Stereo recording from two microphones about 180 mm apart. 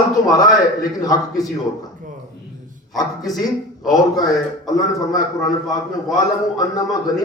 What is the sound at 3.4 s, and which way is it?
A man's voice, 20° left (ahead or behind).